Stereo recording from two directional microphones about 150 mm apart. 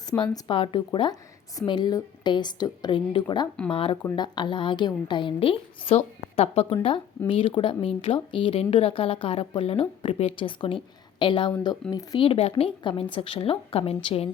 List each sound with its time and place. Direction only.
0.1 s a woman's voice: 30° left (ahead or behind)